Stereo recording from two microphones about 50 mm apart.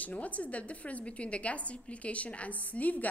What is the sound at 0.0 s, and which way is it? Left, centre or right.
A woman's voice, left.